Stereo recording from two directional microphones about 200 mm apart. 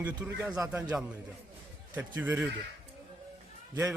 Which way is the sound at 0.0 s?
10° right (ahead or behind).